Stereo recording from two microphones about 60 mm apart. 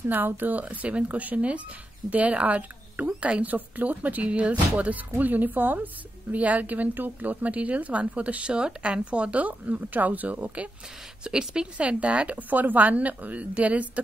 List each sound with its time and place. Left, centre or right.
0.1 s a woman's voice: right
11.2 s a woman's voice: centre